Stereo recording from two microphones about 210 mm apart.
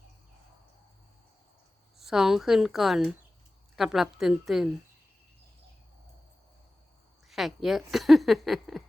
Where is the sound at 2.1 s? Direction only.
Centre (ahead or behind).